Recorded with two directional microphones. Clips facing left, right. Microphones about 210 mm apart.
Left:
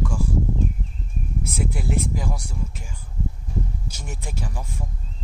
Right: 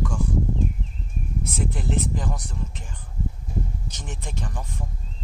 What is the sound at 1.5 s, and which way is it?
Speech, 10° left (ahead or behind).